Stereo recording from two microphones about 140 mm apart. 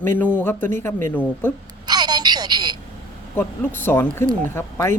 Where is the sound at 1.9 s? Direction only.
30° right (ahead or behind).